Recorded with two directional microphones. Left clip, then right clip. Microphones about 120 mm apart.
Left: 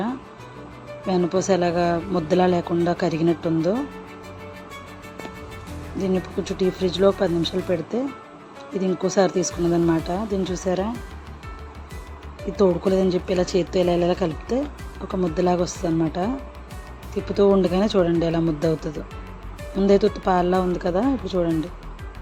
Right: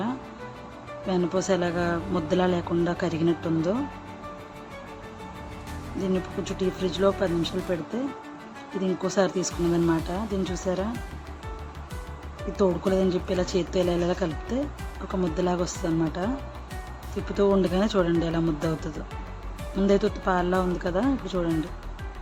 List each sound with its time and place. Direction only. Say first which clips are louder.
1.0 s speech: left 4 dB; 15° left (ahead or behind)
6.0 s speech: left 4 dB; 15° left (ahead or behind)
12.5 s speech: left 4 dB; 20° left (ahead or behind)